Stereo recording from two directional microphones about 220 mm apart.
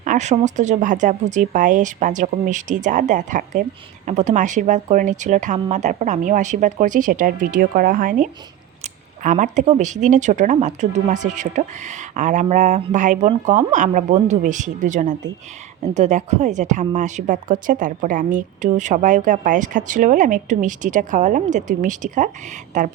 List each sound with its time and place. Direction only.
0.0 s speech: 35° right (ahead or behind)